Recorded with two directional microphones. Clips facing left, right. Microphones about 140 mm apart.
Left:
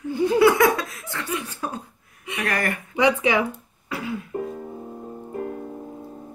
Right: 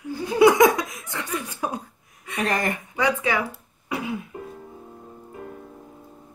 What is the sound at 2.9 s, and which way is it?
Speech, 20° left (ahead or behind).